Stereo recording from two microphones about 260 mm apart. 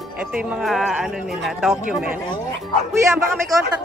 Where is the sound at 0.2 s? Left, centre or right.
Centre.